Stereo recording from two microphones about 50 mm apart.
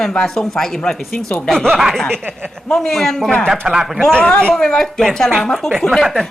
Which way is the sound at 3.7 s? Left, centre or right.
Centre.